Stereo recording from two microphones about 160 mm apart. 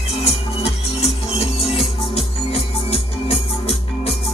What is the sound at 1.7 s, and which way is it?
Music, 40° left (ahead or behind).